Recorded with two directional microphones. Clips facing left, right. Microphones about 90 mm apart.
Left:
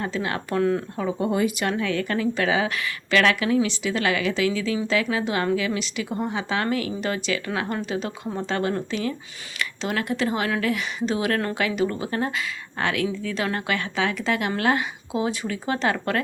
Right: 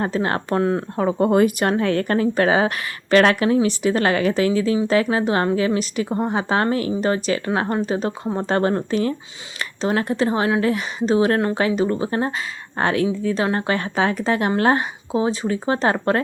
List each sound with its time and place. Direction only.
0.0 s speech: 40° right (ahead or behind)
0.9 s a woman's voice: 50° right (ahead or behind); by 16.2 s 30° right (ahead or behind)